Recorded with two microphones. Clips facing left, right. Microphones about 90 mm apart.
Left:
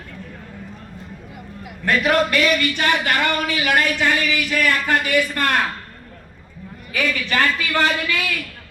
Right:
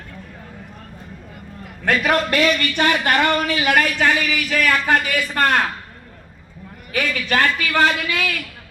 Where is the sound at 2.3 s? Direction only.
45° right (ahead or behind).